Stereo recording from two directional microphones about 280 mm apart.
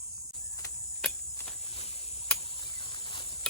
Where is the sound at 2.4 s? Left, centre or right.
Centre.